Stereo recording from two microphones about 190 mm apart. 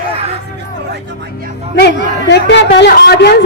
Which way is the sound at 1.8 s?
60° left (ahead or behind).